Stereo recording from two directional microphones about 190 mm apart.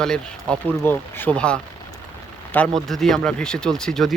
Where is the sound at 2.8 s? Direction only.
Centre (ahead or behind).